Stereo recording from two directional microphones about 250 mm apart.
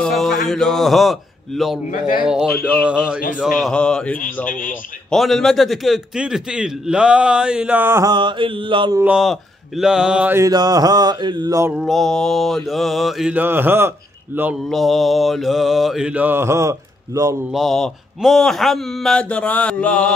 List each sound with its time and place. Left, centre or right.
0.0 s mantra: centre
4.5 s a man's voice: left
5.1 s mantra: centre
9.0 s mantra: centre
17.5 s mantra: centre